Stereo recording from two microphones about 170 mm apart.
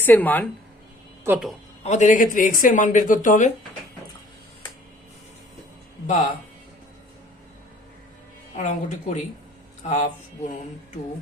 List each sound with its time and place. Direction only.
0.0 s speech: 10° left (ahead or behind)
1.3 s speech: 15° right (ahead or behind)
1.8 s speech: 45° left (ahead or behind)
8.5 s speech: 45° left (ahead or behind)